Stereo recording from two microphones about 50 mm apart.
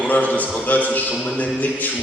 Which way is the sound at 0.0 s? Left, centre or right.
Left.